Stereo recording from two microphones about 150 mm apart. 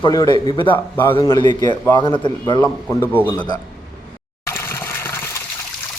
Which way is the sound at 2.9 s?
15° left (ahead or behind).